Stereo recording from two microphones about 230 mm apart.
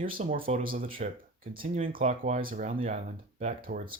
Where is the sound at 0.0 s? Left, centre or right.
Right.